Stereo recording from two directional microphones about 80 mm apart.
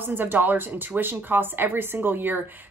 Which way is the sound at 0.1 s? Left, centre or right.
Right.